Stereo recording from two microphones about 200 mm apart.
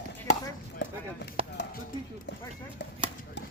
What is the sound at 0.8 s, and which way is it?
Run, 60° left (ahead or behind).